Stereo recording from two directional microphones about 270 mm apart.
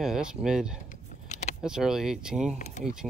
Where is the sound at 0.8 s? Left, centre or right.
Left.